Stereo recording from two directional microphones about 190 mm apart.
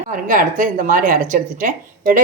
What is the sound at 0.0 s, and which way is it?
A woman's voice, 45° right (ahead or behind).